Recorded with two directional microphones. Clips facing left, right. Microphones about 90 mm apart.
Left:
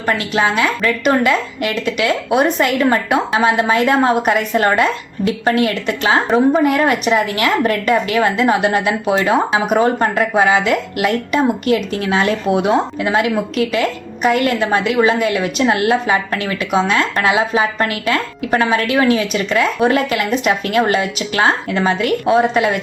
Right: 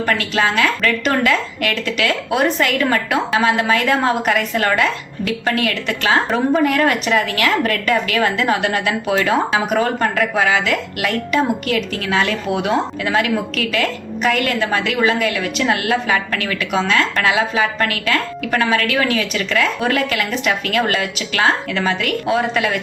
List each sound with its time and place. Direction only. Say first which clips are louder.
0.0 s a woman's voice: left 1 dB; 20° left (ahead or behind)